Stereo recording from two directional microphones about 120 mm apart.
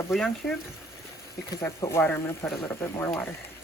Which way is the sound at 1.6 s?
20° left (ahead or behind).